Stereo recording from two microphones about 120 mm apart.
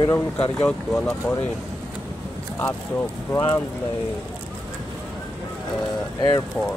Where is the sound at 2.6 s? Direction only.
20° left (ahead or behind).